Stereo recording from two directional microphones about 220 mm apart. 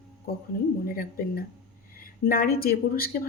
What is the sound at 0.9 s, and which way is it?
Speech, 40° left (ahead or behind).